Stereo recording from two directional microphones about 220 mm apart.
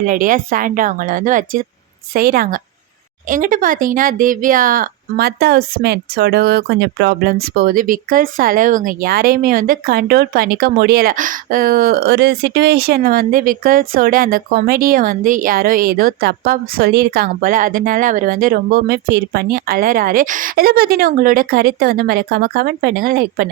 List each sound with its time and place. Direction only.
0.0 s speech: 40° right (ahead or behind)